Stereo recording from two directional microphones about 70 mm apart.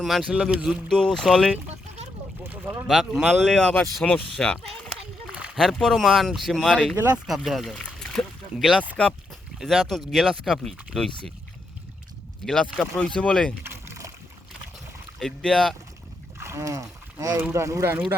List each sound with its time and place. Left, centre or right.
0.0 s speech: centre
0.5 s speech: centre
0.9 s speech: centre
2.9 s speech: centre
6.9 s speech: right
7.3 s speech: centre
7.9 s a sound: centre
8.9 s speech: centre
9.6 s speech: centre
12.5 s speech: centre
13.7 s rowboat: right
15.2 s speech: centre
16.4 s speech: right